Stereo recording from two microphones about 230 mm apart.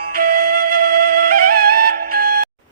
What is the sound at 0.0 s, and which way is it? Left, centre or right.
Music, right.